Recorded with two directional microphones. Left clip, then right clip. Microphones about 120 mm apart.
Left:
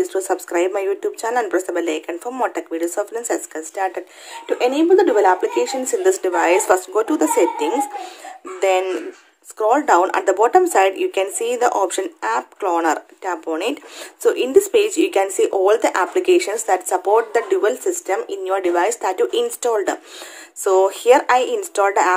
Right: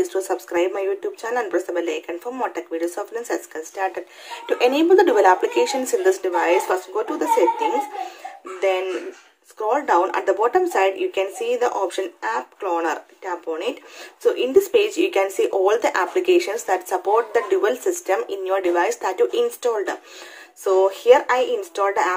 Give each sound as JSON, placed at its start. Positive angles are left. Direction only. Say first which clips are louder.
{"t": 0.0, "sound": "speech", "louder": "left 2 dB", "side_deg": 30}
{"t": 4.5, "sound": "speech", "louder": "left 1 dB", "side_deg": 20}
{"t": 6.0, "sound": "speech", "louder": "left 4 dB", "side_deg": 40}
{"t": 14.2, "sound": "speech", "louder": "left 2 dB", "side_deg": 40}
{"t": 17.6, "sound": "speech", "louder": "left 2 dB", "side_deg": 20}